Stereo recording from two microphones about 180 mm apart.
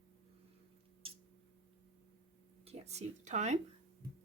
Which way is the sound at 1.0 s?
30° right (ahead or behind).